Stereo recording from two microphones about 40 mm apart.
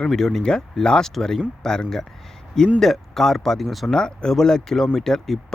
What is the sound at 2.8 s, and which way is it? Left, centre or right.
Speech, centre.